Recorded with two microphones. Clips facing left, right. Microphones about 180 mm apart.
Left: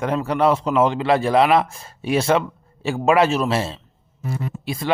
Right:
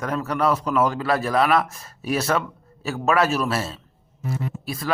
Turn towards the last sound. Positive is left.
turn(degrees=25)  # may be behind; listen again after turning